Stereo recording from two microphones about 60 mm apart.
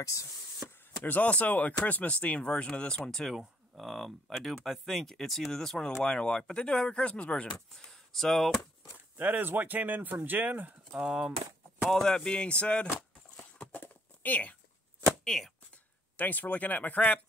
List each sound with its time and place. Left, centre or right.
0.0 s a sound: left
0.7 s speech: left
7.5 s speech: centre
9.1 s speech: right
10.9 s speech: centre
11.8 s speech: centre
13.6 s a sound: left
15.2 s speech: centre
15.7 s speech: left